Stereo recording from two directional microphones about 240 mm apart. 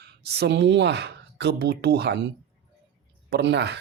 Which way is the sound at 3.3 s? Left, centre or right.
Right.